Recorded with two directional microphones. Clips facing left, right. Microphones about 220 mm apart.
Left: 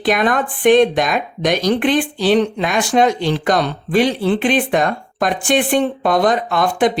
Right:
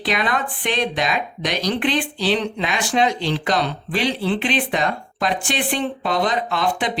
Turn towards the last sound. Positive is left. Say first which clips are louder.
# left 6 dB
turn(degrees=50)  # may be behind; listen again after turning